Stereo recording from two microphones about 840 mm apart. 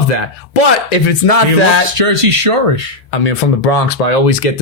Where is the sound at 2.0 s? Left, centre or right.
Right.